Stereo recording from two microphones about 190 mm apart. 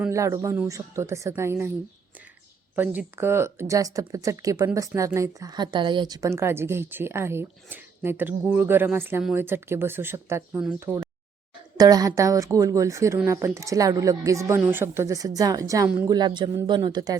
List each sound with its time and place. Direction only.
0.1 s speech: 15° right (ahead or behind)
2.7 s speech: 10° right (ahead or behind)
10.9 s speech: 10° left (ahead or behind)
11.8 s speech: 20° right (ahead or behind)